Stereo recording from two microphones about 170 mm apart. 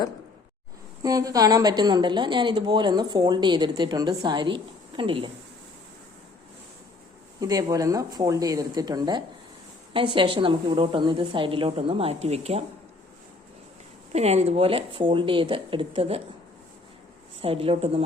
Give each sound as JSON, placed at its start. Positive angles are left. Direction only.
{"t": 1.0, "sound": "a woman's voice", "side_deg": -20}
{"t": 7.3, "sound": "a woman's voice", "side_deg": -20}
{"t": 14.1, "sound": "a woman's voice", "side_deg": -40}
{"t": 17.4, "sound": "a woman's voice", "side_deg": -35}